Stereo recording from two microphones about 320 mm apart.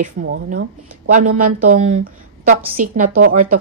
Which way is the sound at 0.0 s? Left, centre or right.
Right.